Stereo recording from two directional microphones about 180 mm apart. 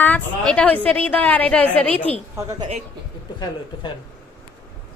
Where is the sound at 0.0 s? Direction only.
10° left (ahead or behind).